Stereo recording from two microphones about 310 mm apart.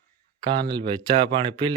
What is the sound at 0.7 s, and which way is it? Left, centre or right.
A man's voice, centre.